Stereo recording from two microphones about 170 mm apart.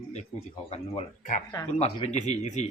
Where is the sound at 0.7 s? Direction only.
35° left (ahead or behind).